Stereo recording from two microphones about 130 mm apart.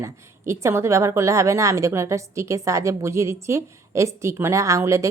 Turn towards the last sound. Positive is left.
turn(degrees=-25)  # may be behind; listen again after turning